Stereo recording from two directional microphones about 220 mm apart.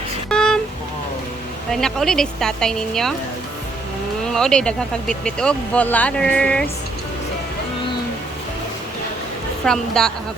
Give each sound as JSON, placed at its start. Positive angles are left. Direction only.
{"t": 0.3, "sound": "a sound", "side_deg": 5}
{"t": 1.7, "sound": "speech", "side_deg": 0}
{"t": 4.3, "sound": "speech", "side_deg": 5}
{"t": 9.6, "sound": "speech", "side_deg": 5}